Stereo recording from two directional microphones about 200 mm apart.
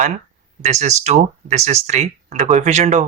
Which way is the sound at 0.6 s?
35° right (ahead or behind).